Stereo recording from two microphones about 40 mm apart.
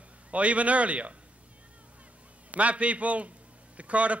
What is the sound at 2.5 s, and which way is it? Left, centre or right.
A man's voice, right.